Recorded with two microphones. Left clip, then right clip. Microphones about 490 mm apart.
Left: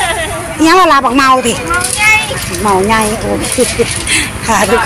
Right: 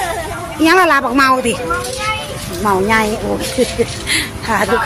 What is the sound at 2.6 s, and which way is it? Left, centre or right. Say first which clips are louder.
Speech: left 3 dB; right.